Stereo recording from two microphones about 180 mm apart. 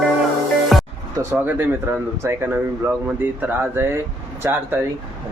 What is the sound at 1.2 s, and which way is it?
Speech, 15° right (ahead or behind).